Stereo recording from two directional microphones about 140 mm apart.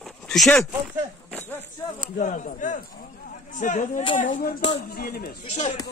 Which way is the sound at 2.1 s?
60° left (ahead or behind).